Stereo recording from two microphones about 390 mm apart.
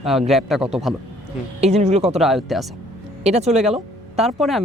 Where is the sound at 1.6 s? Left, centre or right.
Centre.